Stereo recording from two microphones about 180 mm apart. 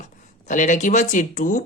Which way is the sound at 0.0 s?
45° left (ahead or behind).